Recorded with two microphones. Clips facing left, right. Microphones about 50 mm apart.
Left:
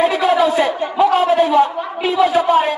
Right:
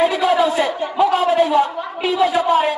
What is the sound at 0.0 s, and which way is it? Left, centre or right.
Speech, left.